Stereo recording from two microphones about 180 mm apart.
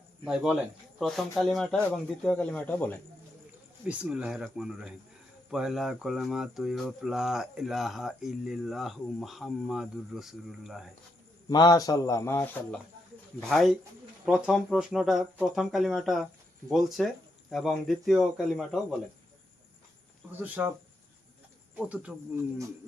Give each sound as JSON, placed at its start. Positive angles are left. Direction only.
{"t": 0.3, "sound": "speech", "side_deg": -5}
{"t": 3.8, "sound": "speech", "side_deg": -5}
{"t": 11.4, "sound": "a man's voice", "side_deg": 25}
{"t": 13.5, "sound": "speech", "side_deg": 0}
{"t": 20.4, "sound": "cricket", "side_deg": -10}
{"t": 21.8, "sound": "cricket", "side_deg": -5}